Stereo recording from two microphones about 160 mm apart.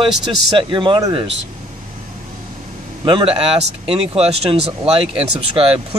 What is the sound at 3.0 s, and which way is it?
Speech, 35° right (ahead or behind).